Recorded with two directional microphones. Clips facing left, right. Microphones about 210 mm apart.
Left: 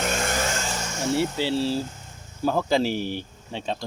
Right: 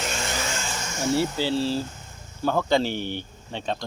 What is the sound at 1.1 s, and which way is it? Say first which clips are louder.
Speech: left 1 dB; centre (ahead or behind).